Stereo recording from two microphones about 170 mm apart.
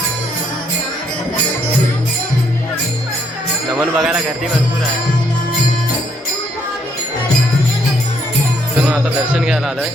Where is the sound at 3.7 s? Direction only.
5° right (ahead or behind).